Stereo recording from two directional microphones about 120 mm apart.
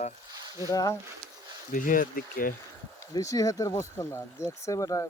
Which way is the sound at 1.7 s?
90° left.